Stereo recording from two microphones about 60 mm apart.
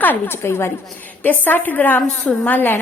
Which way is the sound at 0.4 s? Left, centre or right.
Left.